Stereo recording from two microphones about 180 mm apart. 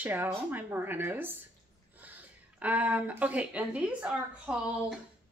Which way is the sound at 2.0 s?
10° right (ahead or behind).